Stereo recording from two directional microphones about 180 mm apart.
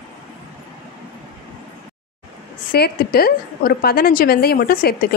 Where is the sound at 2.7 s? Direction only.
60° left (ahead or behind).